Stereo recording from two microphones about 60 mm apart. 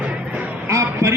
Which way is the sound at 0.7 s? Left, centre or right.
Right.